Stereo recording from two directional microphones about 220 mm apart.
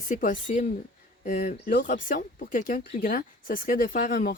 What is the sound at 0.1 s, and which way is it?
Speech, 35° left (ahead or behind).